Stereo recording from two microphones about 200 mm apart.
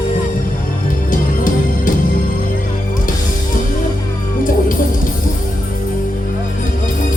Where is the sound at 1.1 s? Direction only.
40° left (ahead or behind).